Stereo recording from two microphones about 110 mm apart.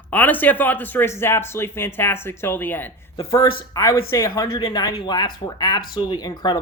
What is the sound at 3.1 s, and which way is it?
Speech, 30° left (ahead or behind).